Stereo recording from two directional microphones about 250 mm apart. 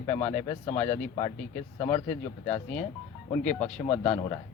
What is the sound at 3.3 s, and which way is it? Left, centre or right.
Speech, centre.